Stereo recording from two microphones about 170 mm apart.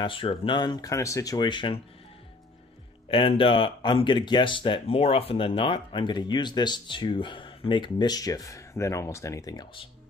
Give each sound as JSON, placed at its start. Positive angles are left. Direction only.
{"t": 0.0, "sound": "speech", "side_deg": 30}
{"t": 3.1, "sound": "speech", "side_deg": 30}